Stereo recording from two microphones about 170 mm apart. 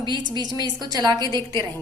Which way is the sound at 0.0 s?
25° right (ahead or behind).